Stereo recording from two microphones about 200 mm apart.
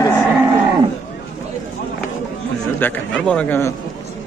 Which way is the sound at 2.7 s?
10° left (ahead or behind).